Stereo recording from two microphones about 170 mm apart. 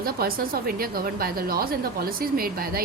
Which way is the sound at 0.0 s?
60° right (ahead or behind).